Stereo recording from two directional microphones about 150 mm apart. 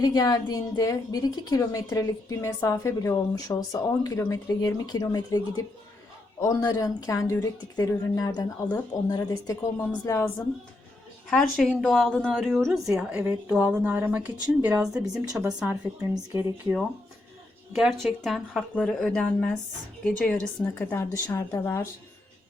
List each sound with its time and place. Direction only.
0.0 s a woman's voice: 25° left (ahead or behind)
6.4 s a woman's voice: 25° left (ahead or behind)
11.3 s a woman's voice: 5° left (ahead or behind); by 16.7 s 15° right (ahead or behind)
18.0 s a woman's voice: centre (ahead or behind); by 21.8 s 20° left (ahead or behind)